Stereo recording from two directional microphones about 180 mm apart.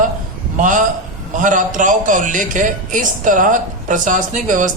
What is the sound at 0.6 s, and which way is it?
A man's voice, 45° right (ahead or behind).